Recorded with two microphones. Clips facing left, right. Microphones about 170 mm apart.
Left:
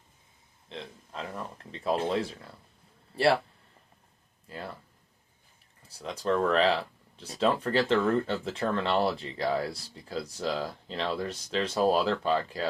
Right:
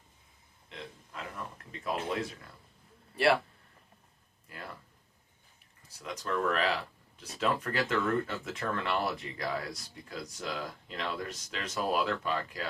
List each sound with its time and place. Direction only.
0.7 s a sound: 30° left (ahead or behind)
1.7 s speech: 30° left (ahead or behind)
4.4 s speech: 30° left (ahead or behind)
6.0 s speech: 30° left (ahead or behind)